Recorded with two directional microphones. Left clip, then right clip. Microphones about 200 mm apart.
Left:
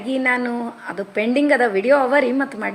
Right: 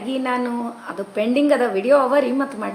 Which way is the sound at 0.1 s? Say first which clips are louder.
Left 3 dB; 15° left (ahead or behind).